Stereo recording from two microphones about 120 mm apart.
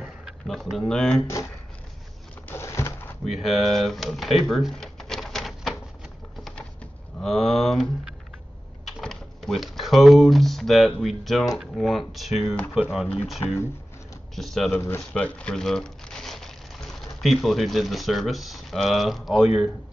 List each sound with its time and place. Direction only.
0.0 s speech: centre (ahead or behind)
1.2 s speech: 25° left (ahead or behind)
2.4 s a sound: 20° left (ahead or behind)
3.3 s speech: centre (ahead or behind)
6.3 s a sound: centre (ahead or behind)
7.2 s speech: centre (ahead or behind)
14.3 s speech: centre (ahead or behind)
14.7 s speech: 15° left (ahead or behind); by 19.4 s centre (ahead or behind)